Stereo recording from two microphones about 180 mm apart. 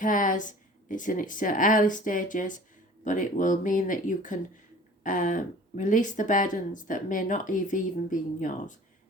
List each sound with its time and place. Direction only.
0.0 s speech: 45° left (ahead or behind)